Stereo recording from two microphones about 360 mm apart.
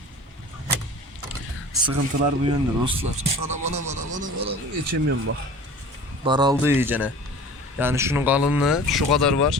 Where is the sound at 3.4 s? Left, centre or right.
Right.